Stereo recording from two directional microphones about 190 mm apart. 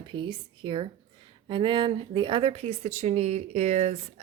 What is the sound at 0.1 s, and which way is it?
A woman's voice, 25° right (ahead or behind).